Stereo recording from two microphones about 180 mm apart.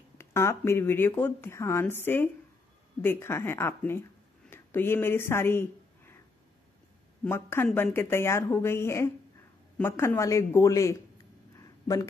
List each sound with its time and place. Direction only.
0.2 s speech: 15° left (ahead or behind)
7.2 s speech: 15° left (ahead or behind)
11.5 s a sound: 20° left (ahead or behind)